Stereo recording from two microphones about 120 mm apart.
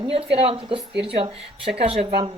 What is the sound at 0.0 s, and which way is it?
A woman's voice, 50° right (ahead or behind).